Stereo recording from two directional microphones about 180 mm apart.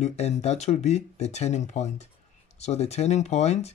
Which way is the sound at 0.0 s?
35° left (ahead or behind).